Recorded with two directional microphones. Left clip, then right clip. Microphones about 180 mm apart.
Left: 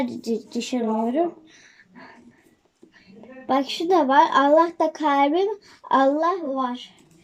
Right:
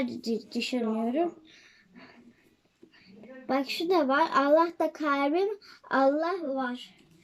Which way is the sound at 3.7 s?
10° right (ahead or behind).